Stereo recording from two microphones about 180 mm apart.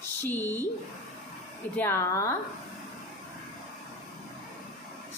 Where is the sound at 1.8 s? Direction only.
15° left (ahead or behind).